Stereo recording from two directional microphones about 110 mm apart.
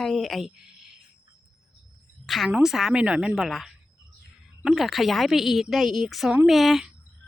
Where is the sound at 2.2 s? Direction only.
Centre (ahead or behind).